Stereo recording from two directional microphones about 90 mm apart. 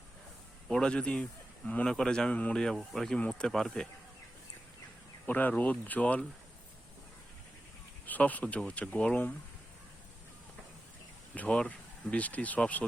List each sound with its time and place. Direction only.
0.7 s a man's voice: 10° left (ahead or behind)
5.2 s a man's voice: 20° left (ahead or behind)
8.0 s a man's voice: 20° left (ahead or behind)
11.3 s a man's voice: 15° left (ahead or behind)